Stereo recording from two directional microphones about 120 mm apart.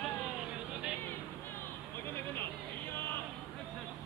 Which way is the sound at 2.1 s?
20° left (ahead or behind).